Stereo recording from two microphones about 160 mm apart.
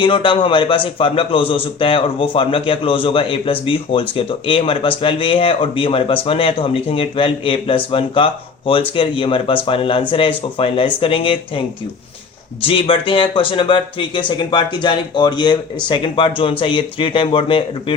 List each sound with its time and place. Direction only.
0.0 s speech: 30° left (ahead or behind)
12.6 s speech: 35° left (ahead or behind)